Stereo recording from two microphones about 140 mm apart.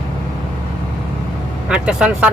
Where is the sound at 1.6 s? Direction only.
5° right (ahead or behind).